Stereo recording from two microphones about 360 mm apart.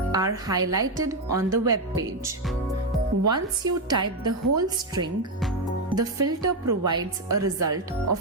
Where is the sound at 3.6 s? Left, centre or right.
Centre.